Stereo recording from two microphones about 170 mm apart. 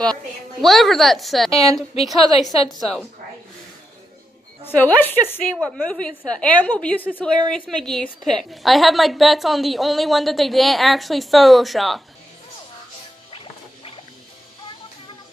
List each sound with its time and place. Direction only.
0.0 s a woman's voice: 5° left (ahead or behind)
2.8 s a woman's voice: centre (ahead or behind)
4.6 s a woman's voice: 10° left (ahead or behind)
13.3 s music: 30° left (ahead or behind)